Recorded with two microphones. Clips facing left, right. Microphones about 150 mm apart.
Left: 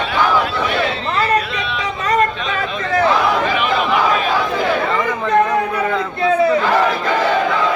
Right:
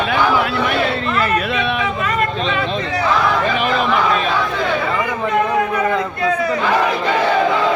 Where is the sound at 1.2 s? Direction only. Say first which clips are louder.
Left 2 dB; 55° right (ahead or behind).